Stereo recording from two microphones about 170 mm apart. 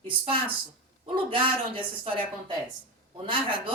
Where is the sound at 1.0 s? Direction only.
30° right (ahead or behind).